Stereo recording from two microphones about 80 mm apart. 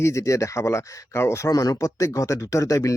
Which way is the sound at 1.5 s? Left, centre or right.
Left.